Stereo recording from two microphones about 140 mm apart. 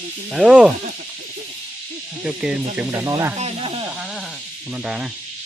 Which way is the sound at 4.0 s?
5° right (ahead or behind).